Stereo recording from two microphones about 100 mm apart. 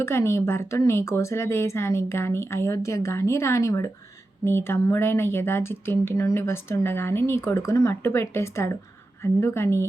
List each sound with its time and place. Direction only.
0.0 s speech: 25° left (ahead or behind)